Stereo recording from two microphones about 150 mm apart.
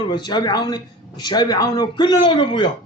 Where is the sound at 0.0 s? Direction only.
30° left (ahead or behind).